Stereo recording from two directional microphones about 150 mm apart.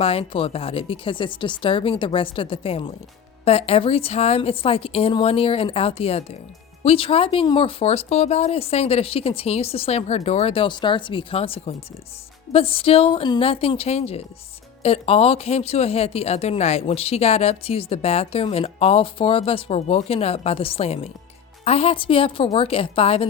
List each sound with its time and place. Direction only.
0.0 s speech: 40° left (ahead or behind)